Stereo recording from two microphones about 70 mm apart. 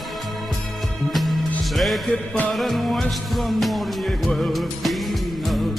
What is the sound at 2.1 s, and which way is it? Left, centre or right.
Music, left.